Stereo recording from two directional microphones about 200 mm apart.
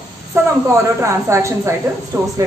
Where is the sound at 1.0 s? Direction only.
15° right (ahead or behind).